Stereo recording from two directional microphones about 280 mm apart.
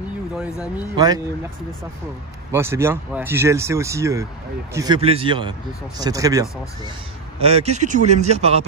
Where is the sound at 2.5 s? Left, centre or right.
Centre.